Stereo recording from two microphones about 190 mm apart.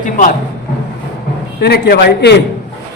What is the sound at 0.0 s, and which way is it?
Speech, 45° left (ahead or behind).